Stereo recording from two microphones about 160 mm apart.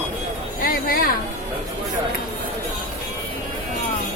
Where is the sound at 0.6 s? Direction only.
65° left (ahead or behind).